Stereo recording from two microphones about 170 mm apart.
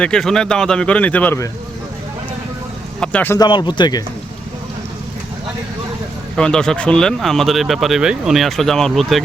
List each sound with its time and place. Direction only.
0.0 s speech: 5° left (ahead or behind)
3.0 s speech: 10° left (ahead or behind)
3.3 s speech: 25° left (ahead or behind)
6.3 s speech: 5° left (ahead or behind)